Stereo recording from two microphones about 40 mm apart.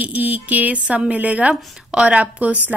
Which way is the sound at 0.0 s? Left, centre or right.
Right.